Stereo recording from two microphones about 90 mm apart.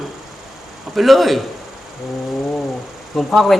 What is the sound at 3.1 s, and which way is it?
Speech, centre (ahead or behind).